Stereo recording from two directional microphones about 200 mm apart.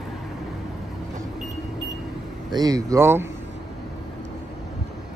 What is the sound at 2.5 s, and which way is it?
Speech, 15° right (ahead or behind).